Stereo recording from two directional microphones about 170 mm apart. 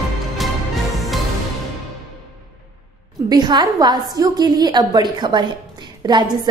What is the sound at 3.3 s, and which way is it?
A woman's voice, 25° right (ahead or behind).